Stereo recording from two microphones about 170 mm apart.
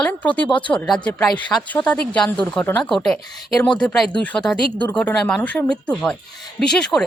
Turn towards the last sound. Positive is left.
turn(degrees=5)  # may be behind; listen again after turning